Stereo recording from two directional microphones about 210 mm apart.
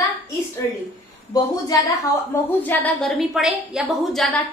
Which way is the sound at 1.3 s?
15° left (ahead or behind).